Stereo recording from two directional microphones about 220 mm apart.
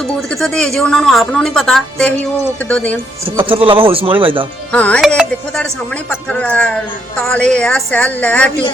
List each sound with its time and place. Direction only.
0.3 s a woman's voice: centre (ahead or behind)
3.3 s speech: 25° right (ahead or behind)
4.7 s a woman's voice: 5° left (ahead or behind)